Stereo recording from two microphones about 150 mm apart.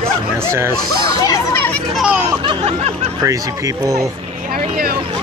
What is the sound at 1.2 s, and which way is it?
Speech, 20° left (ahead or behind).